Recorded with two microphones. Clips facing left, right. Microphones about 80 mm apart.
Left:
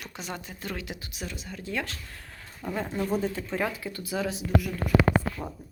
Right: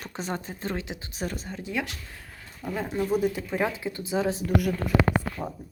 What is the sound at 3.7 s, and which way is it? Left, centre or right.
Speech, right.